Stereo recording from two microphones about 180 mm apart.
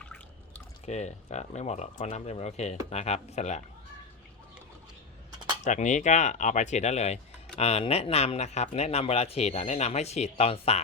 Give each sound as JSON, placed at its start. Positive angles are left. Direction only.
{"t": 0.9, "sound": "speech", "side_deg": 40}
{"t": 5.6, "sound": "speech", "side_deg": 45}